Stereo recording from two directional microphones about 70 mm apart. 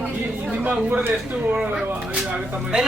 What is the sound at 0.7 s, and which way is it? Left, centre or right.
Speech, right.